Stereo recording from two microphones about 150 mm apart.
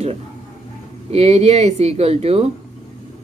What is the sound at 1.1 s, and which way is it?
Speech, 45° right (ahead or behind).